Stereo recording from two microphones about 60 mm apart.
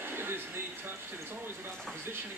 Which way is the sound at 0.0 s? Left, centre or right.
Right.